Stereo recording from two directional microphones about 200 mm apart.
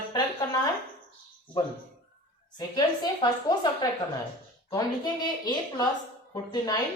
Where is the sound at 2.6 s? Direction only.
20° left (ahead or behind).